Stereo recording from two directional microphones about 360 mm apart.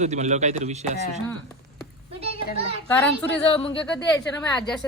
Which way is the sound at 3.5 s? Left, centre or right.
Centre.